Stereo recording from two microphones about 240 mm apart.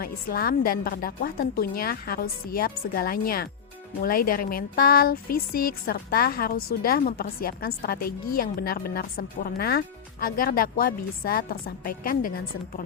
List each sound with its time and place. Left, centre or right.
0.0 s a woman's voice: left